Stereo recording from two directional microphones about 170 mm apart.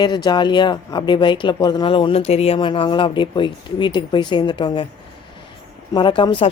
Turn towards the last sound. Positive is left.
turn(degrees=30)  # may be behind; listen again after turning